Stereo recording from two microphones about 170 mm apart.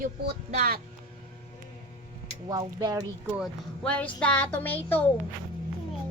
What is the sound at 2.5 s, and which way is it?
Speech, 20° right (ahead or behind).